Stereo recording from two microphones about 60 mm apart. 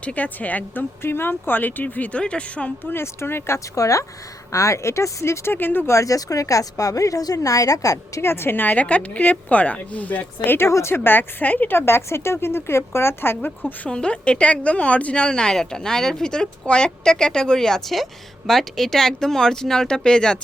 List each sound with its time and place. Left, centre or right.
0.0 s a woman's voice: left
2.9 s speech: left
3.8 s speech: left
5.5 s a woman's voice: left
5.9 s a woman's voice: left
8.2 s speech: left
10.7 s speech: left
10.9 s a woman's voice: left
13.9 s a woman's voice: centre